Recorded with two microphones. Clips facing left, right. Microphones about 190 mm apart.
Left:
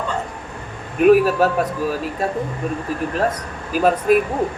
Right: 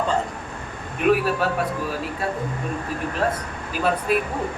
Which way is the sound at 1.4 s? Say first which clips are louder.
Left 6 dB; 40° left (ahead or behind).